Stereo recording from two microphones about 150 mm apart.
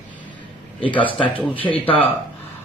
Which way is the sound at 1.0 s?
35° left (ahead or behind).